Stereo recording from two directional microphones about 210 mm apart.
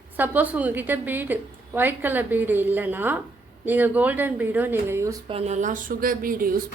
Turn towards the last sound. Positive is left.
turn(degrees=-40)  # may be behind; listen again after turning